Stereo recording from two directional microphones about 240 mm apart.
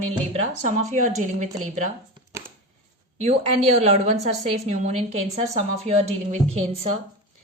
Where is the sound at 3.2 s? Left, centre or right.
Right.